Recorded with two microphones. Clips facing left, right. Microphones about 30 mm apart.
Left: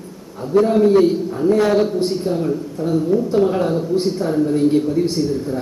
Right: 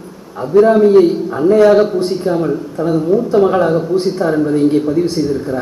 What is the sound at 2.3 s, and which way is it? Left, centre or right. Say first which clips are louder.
Speech: right 5 dB; right.